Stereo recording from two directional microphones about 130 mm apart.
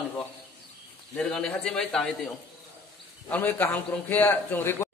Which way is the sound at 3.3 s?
15° left (ahead or behind).